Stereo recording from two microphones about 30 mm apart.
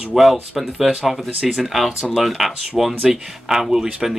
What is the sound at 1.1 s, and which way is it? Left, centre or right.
Speech, centre.